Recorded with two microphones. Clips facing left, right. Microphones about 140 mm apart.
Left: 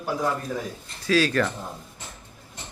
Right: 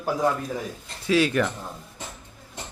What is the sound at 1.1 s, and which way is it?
Speech, 20° right (ahead or behind).